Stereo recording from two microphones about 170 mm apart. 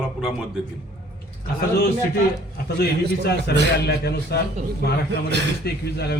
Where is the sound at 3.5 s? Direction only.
75° left (ahead or behind).